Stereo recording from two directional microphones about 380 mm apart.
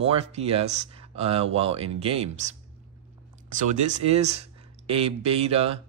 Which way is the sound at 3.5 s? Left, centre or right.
Centre.